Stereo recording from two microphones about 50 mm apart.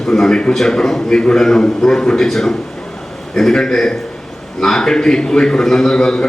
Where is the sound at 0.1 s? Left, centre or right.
Centre.